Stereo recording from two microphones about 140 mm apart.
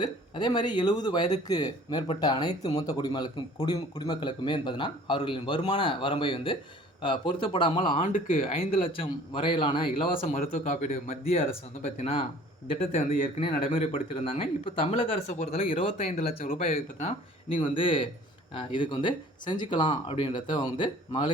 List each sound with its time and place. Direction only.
0.0 s speech: 30° left (ahead or behind)
8.0 s speech: 75° left (ahead or behind)
8.4 s speech: 40° left (ahead or behind)
10.1 s speech: 50° left (ahead or behind)
10.4 s speech: 75° left (ahead or behind); by 11.4 s 45° left (ahead or behind)
11.4 s speech: 60° left (ahead or behind)
13.7 s speech: 45° left (ahead or behind)
16.4 s speech: 75° left (ahead or behind)
16.7 s speech: 50° left (ahead or behind)
17.6 s speech: 40° left (ahead or behind)